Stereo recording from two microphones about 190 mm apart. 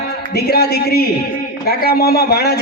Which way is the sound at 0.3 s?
55° left (ahead or behind).